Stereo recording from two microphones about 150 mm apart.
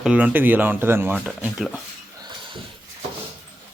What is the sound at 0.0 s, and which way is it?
Speech, 10° right (ahead or behind).